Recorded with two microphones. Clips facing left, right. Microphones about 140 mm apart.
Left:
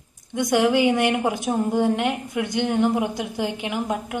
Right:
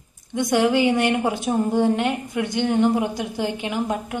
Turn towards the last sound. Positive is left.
turn(degrees=10)  # may be behind; listen again after turning